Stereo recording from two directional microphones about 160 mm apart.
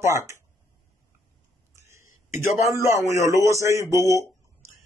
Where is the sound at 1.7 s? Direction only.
15° right (ahead or behind).